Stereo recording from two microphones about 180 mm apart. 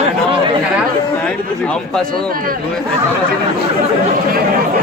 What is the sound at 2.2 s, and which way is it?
Speech, 55° right (ahead or behind).